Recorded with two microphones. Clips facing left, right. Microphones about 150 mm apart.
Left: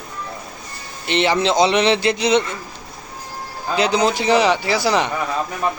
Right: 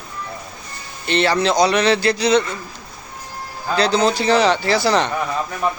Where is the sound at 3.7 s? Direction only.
15° left (ahead or behind).